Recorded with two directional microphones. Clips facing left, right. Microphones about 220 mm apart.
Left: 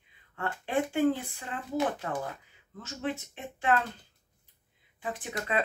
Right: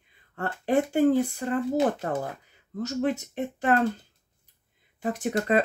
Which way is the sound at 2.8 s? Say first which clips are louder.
Right 8 dB; 40° right (ahead or behind).